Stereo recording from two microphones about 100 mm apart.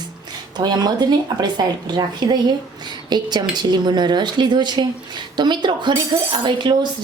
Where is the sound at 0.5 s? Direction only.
45° right (ahead or behind).